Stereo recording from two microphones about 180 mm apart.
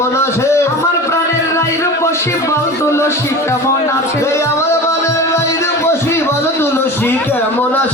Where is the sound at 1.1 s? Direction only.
15° left (ahead or behind).